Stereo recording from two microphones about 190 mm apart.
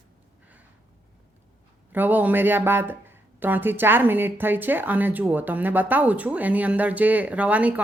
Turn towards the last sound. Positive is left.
turn(degrees=-5)  # may be behind; listen again after turning